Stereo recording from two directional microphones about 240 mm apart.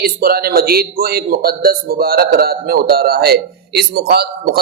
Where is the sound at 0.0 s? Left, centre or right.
Right.